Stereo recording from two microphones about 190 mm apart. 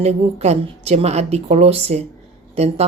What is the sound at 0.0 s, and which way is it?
Speech, 35° right (ahead or behind).